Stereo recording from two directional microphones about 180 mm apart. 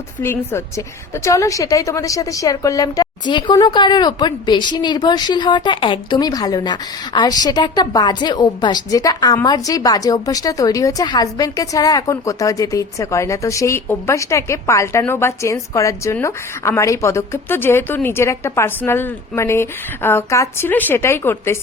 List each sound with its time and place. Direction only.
0.2 s a woman's voice: 15° left (ahead or behind)